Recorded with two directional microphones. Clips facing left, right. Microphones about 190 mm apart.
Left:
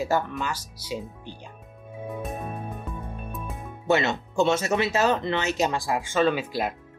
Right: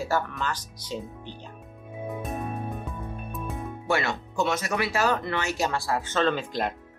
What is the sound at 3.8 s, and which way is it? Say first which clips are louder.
Speech: left 4 dB; 20° left (ahead or behind).